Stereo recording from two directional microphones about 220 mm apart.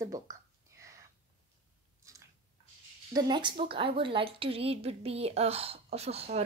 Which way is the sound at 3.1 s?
20° right (ahead or behind).